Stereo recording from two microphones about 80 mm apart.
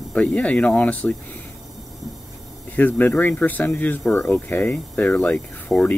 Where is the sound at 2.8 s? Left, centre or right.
Left.